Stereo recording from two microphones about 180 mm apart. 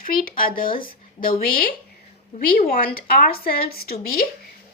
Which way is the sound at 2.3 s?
40° left (ahead or behind).